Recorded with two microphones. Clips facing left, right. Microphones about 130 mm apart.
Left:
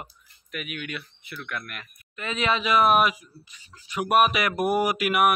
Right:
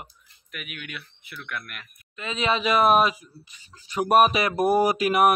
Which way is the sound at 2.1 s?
20° right (ahead or behind).